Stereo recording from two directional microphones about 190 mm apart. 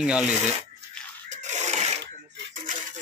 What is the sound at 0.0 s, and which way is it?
Speech, 5° right (ahead or behind).